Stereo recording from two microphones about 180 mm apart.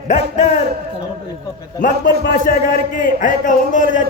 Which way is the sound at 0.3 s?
40° left (ahead or behind).